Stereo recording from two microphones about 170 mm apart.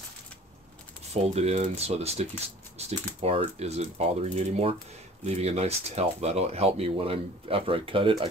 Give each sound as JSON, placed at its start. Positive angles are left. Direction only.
{"t": 1.1, "sound": "speech", "side_deg": -40}